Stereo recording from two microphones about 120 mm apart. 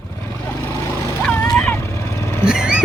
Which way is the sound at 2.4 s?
5° right (ahead or behind).